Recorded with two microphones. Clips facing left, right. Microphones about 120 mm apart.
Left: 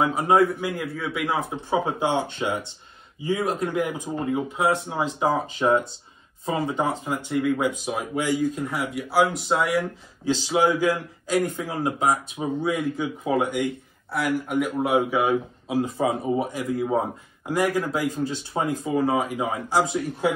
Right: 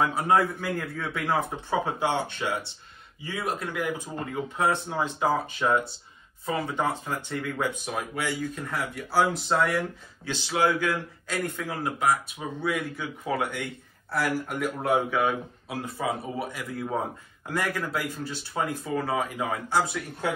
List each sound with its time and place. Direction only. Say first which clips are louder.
0.3 s a man's voice: left 5 dB; 10° left (ahead or behind)
1.7 s speech: left 4 dB; 20° left (ahead or behind)
8.9 s a man's voice: left 3 dB; 5° left (ahead or behind)
10.5 s speech: left 3 dB; 20° left (ahead or behind)
14.1 s a man's voice: left 4 dB; centre (ahead or behind)
15.0 s speech: left 4 dB; 15° left (ahead or behind)